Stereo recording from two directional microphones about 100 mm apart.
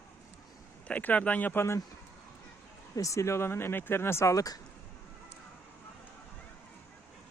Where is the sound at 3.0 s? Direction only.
30° left (ahead or behind).